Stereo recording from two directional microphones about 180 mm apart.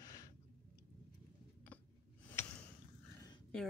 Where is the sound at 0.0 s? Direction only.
20° left (ahead or behind).